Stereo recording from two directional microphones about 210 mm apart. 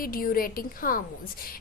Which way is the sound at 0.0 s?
40° left (ahead or behind).